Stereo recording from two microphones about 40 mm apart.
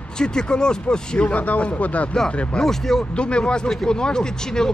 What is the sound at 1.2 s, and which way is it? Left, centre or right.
Speech, left.